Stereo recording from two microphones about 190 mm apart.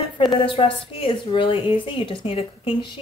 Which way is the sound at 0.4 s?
25° left (ahead or behind).